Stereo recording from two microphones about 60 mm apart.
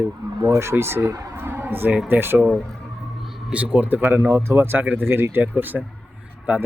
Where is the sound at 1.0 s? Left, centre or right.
Right.